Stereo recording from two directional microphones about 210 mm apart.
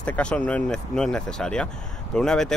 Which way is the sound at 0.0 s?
5° left (ahead or behind).